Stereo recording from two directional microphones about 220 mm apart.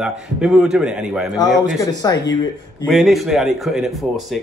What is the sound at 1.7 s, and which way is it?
Speech, 15° left (ahead or behind).